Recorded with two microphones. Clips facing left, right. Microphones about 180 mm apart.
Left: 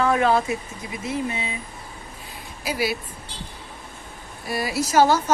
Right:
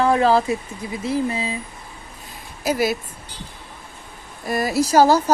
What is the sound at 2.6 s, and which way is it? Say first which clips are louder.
Speech: right 5 dB; 45° right (ahead or behind).